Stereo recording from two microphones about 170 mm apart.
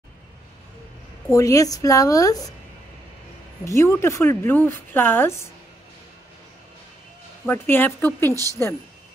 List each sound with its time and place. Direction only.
1.3 s a woman's voice: 20° left (ahead or behind)
3.6 s speech: 15° left (ahead or behind)
7.4 s speech: 15° left (ahead or behind)